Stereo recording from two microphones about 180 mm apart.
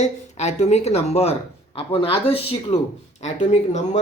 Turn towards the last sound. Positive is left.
turn(degrees=40)  # may be behind; listen again after turning